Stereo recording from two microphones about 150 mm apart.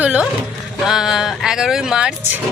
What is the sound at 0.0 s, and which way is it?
Speech, 10° right (ahead or behind).